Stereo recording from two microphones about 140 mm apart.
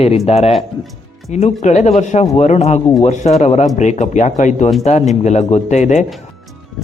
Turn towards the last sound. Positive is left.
turn(degrees=55)  # may be behind; listen again after turning